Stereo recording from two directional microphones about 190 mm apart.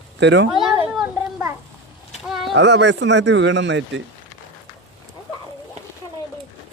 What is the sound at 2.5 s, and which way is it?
Speech, 65° right (ahead or behind).